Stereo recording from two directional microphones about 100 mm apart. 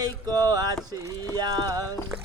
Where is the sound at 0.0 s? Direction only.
40° right (ahead or behind).